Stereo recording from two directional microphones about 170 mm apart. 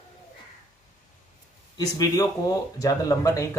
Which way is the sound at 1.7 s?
20° left (ahead or behind).